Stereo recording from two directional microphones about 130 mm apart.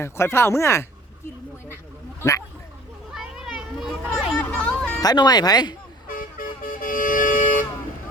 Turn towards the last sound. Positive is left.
turn(degrees=90)